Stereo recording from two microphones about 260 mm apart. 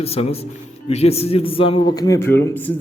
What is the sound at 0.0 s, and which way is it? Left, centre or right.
A man's voice, left.